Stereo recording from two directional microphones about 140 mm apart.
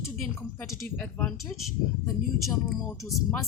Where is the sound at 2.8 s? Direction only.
25° left (ahead or behind).